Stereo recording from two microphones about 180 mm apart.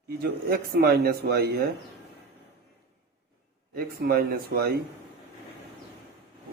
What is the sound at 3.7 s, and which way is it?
Speech, 60° right (ahead or behind).